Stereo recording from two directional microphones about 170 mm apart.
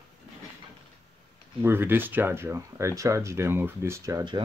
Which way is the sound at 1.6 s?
15° right (ahead or behind).